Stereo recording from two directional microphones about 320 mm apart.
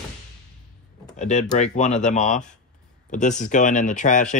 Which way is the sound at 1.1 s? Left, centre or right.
Left.